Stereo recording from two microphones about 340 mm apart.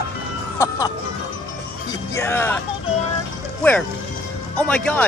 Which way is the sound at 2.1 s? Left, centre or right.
Centre.